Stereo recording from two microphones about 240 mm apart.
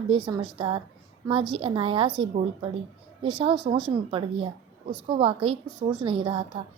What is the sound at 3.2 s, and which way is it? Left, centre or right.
Speech, right.